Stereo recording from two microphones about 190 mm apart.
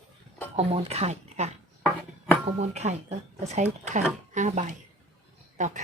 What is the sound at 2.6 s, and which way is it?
Speech, 35° right (ahead or behind).